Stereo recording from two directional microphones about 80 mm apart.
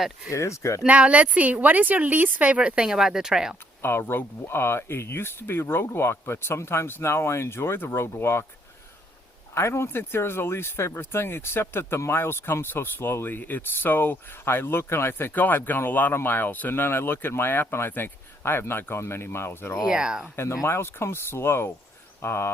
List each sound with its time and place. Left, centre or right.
0.3 s speech: left
0.9 s a woman's voice: centre
3.8 s speech: left
9.6 s speech: left
19.8 s a woman's voice: centre
20.3 s speech: left